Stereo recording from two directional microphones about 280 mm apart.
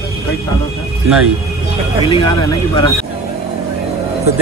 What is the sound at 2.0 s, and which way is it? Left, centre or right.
Speech, centre.